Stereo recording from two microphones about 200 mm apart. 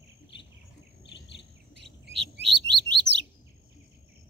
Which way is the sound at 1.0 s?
60° left (ahead or behind).